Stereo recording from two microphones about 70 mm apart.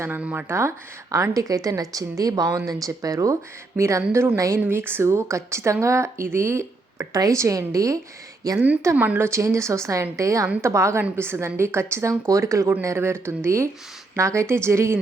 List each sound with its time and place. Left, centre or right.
0.2 s speech: right
1.1 s a woman's voice: right
2.5 s a woman's voice: right
2.8 s a woman's voice: right
4.6 s speech: right
7.1 s a woman's voice: right
9.1 s a woman's voice: right